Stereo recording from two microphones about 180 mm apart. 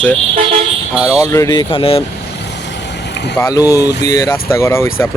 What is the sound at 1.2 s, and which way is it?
Speech, 20° left (ahead or behind).